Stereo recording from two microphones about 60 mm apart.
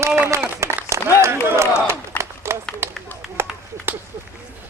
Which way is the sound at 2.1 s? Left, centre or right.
Left.